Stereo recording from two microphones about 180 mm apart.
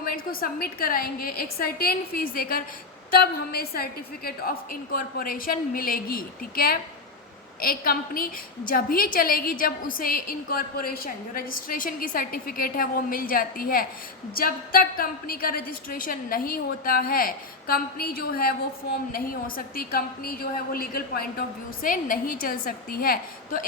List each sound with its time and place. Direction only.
0.0 s a woman's voice: 50° left (ahead or behind)